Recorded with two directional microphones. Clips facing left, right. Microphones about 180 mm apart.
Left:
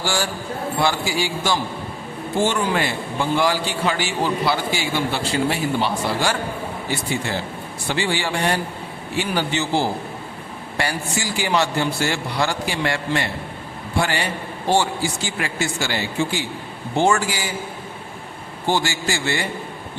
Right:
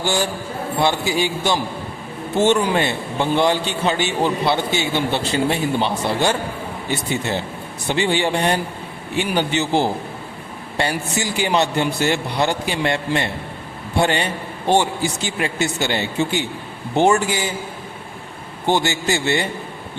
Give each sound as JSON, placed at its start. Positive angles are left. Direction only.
{"t": 0.0, "sound": "a man's voice", "side_deg": -20}
{"t": 18.6, "sound": "a man's voice", "side_deg": -20}